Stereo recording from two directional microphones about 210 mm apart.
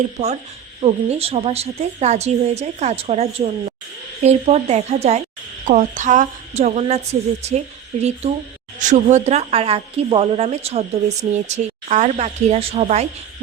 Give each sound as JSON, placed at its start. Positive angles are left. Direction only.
{"t": 0.8, "sound": "speech", "side_deg": -30}
{"t": 8.8, "sound": "speech", "side_deg": -35}